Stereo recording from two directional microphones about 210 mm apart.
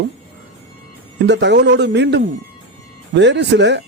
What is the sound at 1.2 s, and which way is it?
Speech, 55° right (ahead or behind).